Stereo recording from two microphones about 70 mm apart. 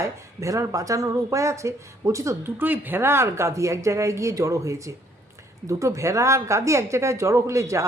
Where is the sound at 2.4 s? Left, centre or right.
Right.